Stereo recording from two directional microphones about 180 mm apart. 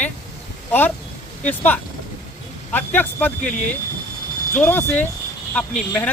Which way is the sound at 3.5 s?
45° left (ahead or behind).